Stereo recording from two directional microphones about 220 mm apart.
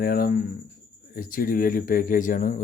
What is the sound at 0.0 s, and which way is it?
Speech, 40° left (ahead or behind).